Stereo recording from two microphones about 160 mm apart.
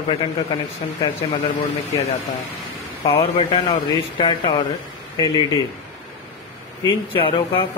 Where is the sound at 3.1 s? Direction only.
35° left (ahead or behind).